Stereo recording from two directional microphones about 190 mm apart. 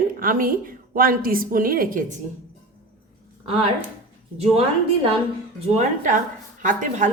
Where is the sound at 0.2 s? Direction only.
50° right (ahead or behind).